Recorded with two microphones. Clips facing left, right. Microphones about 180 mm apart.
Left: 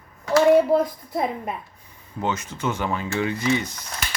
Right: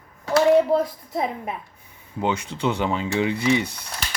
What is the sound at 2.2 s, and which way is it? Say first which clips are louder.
Speech: right 2 dB; 15° right (ahead or behind).